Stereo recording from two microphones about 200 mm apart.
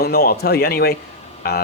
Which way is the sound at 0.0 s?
50° left (ahead or behind).